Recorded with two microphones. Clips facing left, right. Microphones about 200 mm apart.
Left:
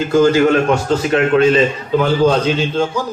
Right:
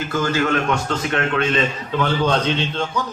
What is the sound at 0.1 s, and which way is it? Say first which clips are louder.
A man's voice: left 9 dB; 40° left (ahead or behind).